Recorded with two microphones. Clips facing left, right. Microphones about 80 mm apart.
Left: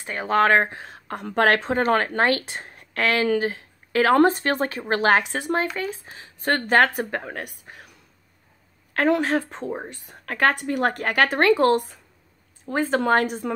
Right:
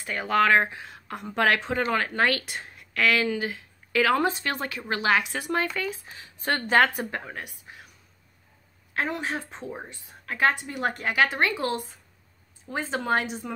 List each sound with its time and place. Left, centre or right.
0.0 s a woman's voice: left
8.9 s a woman's voice: left
9.5 s speech: left
9.8 s a woman's voice: left